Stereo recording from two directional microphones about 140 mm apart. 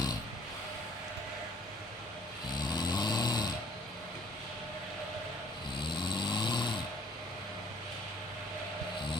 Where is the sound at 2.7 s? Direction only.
30° left (ahead or behind).